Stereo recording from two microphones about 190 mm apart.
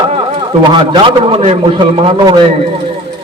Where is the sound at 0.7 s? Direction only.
25° right (ahead or behind).